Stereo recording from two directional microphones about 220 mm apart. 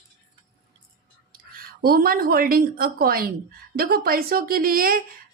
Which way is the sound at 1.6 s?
40° right (ahead or behind).